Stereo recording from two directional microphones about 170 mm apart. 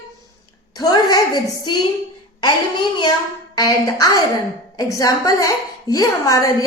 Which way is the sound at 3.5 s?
20° left (ahead or behind).